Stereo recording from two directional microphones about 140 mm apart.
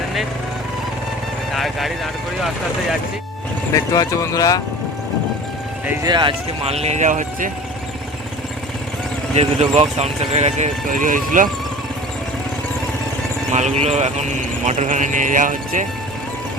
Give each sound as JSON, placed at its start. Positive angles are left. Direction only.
{"t": 1.5, "sound": "vehicle", "side_deg": 0}
{"t": 3.9, "sound": "speech", "side_deg": 20}
{"t": 6.0, "sound": "speech", "side_deg": -30}
{"t": 6.7, "sound": "speech", "side_deg": -50}
{"t": 9.3, "sound": "speech", "side_deg": -45}
{"t": 13.5, "sound": "speech", "side_deg": -55}